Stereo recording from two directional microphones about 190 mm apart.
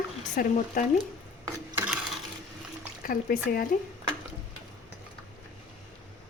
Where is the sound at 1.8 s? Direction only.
5° right (ahead or behind).